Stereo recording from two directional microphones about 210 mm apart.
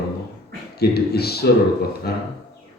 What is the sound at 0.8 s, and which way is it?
A man's voice, 50° left (ahead or behind).